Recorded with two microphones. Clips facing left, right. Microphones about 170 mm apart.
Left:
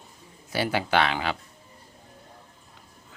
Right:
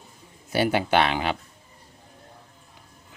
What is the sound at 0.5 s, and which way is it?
Speech, 25° right (ahead or behind).